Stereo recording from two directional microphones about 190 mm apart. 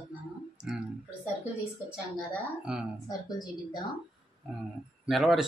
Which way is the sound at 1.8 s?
Centre (ahead or behind).